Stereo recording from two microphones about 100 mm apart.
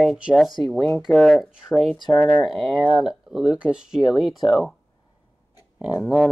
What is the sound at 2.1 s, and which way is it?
Speech, 15° left (ahead or behind).